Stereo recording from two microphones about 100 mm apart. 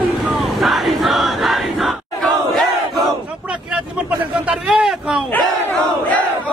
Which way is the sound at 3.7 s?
15° right (ahead or behind).